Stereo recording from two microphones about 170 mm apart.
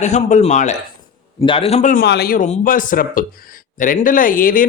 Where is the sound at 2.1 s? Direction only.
65° left (ahead or behind).